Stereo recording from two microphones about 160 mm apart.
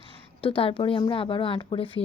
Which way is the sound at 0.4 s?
35° left (ahead or behind).